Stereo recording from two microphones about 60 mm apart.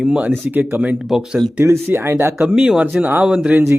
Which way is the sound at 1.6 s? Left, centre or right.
Right.